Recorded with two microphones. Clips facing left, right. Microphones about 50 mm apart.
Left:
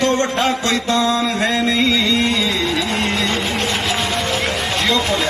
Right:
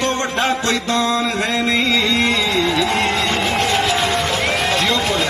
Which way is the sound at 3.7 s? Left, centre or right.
Right.